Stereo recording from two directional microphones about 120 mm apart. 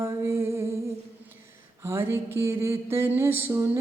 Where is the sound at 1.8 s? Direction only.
25° right (ahead or behind).